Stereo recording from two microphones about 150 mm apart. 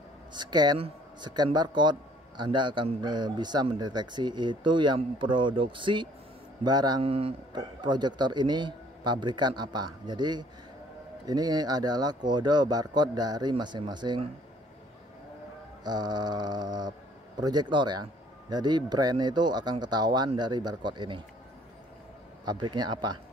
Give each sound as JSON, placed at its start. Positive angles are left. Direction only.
{"t": 0.3, "sound": "a man's voice", "side_deg": -30}
{"t": 7.0, "sound": "a man's voice", "side_deg": -40}
{"t": 15.8, "sound": "a man's voice", "side_deg": -25}
{"t": 22.4, "sound": "a man's voice", "side_deg": -30}